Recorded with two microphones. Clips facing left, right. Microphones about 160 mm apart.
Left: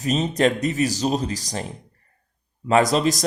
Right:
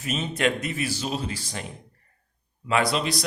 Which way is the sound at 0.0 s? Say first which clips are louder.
Left 6 dB; 40° left (ahead or behind).